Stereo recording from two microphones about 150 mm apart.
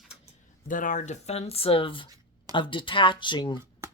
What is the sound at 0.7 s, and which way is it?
Speech, 60° left (ahead or behind).